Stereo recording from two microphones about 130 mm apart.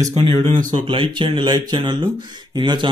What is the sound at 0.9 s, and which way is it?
Speech, 40° right (ahead or behind).